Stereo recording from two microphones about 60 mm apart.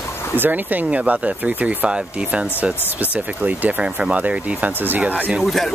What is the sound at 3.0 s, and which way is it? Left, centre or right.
Speech, right.